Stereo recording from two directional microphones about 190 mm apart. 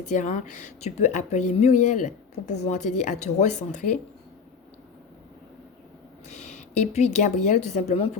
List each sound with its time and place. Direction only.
0.0 s speech: 40° left (ahead or behind)
6.2 s speech: 40° left (ahead or behind)